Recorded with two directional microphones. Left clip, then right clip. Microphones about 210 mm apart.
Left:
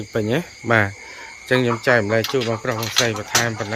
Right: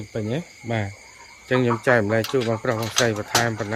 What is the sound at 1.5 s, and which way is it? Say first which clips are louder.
Speech: left 2 dB; 15° right (ahead or behind).